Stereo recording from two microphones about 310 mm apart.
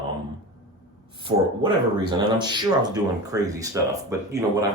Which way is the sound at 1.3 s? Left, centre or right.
Right.